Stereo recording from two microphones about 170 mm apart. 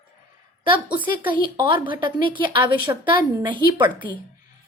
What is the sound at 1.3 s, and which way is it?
Speech, 30° right (ahead or behind).